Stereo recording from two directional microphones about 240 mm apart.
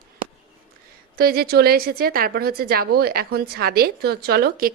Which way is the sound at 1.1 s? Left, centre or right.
Right.